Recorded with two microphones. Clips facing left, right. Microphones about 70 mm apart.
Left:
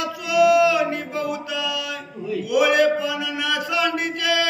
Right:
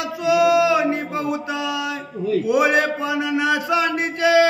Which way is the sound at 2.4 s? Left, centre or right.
Right.